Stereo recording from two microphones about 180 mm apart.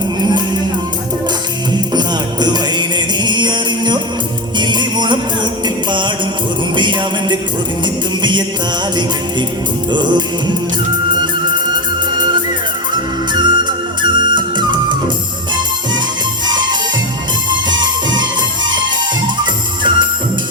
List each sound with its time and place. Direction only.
0.2 s music: 25° right (ahead or behind)
1.7 s music: 25° right (ahead or behind)
9.9 s music: 25° right (ahead or behind)
13.3 s music: 25° right (ahead or behind)
16.5 s music: 25° right (ahead or behind)